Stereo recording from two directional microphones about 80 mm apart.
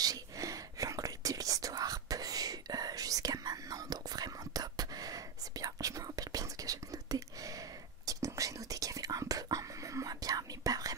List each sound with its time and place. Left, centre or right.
0.0 s whispering: right